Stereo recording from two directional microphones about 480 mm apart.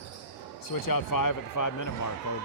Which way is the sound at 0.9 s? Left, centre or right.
Left.